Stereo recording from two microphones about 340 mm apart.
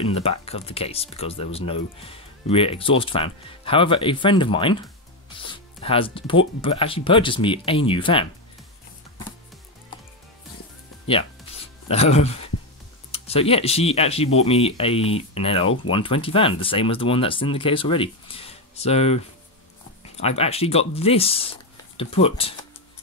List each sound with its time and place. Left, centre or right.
0.0 s speech: centre
11.9 s speech: centre